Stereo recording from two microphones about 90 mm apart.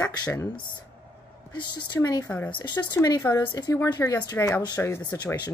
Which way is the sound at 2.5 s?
55° left (ahead or behind).